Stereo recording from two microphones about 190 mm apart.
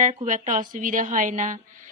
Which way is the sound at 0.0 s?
35° right (ahead or behind).